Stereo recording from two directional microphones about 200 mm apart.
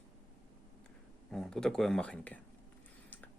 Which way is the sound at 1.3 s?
Centre (ahead or behind).